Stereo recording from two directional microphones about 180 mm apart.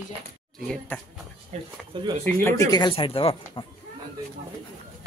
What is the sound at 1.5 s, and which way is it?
Speech, 40° right (ahead or behind).